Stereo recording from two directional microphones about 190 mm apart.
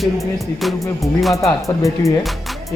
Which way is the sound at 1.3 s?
15° left (ahead or behind).